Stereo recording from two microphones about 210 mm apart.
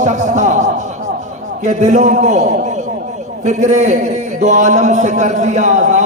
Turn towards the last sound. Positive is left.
turn(degrees=-35)  # may be behind; listen again after turning